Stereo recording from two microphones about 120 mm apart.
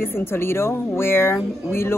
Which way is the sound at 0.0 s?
20° left (ahead or behind).